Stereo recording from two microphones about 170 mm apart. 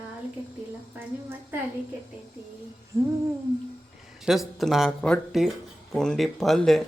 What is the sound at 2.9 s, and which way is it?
Speech, 15° right (ahead or behind).